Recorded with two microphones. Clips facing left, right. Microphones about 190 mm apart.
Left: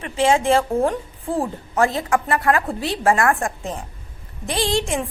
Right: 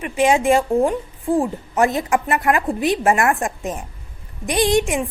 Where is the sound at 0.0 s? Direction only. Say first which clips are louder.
Right 1 dB; 15° right (ahead or behind).